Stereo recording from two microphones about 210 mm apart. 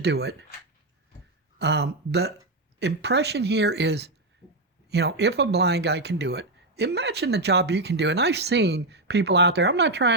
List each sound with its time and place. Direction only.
0.0 s speech: 50° right (ahead or behind)
1.5 s speech: 55° right (ahead or behind)